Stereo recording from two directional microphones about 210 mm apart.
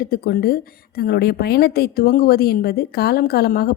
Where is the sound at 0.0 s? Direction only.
45° left (ahead or behind).